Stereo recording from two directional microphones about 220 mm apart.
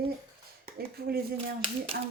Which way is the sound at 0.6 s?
45° right (ahead or behind).